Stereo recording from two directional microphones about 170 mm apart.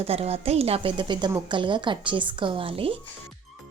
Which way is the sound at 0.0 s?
35° right (ahead or behind).